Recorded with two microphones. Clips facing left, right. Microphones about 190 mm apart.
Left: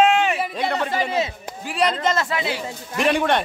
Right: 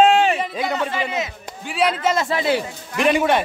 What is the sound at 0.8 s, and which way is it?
Speech, 40° left (ahead or behind).